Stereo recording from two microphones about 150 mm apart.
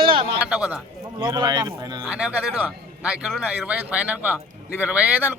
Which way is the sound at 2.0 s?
5° right (ahead or behind).